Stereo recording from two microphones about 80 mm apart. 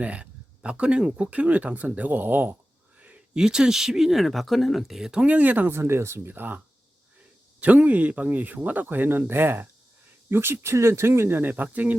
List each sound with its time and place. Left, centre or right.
0.0 s speech: centre
3.0 s speech: centre
5.2 s speech: centre
7.6 s speech: centre